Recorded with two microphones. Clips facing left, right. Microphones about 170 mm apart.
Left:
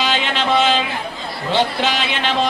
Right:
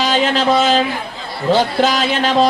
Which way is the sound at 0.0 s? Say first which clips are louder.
Right 5 dB; 40° right (ahead or behind).